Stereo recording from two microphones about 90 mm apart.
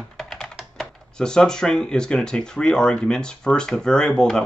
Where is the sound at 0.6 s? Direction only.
5° left (ahead or behind).